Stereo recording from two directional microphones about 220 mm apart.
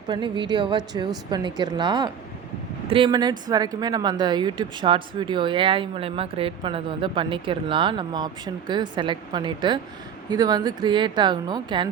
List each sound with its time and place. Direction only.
0.1 s speech: 20° right (ahead or behind)